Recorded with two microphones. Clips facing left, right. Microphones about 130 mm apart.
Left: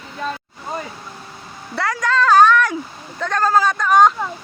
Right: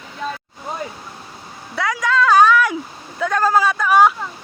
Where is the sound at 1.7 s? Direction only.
Centre (ahead or behind).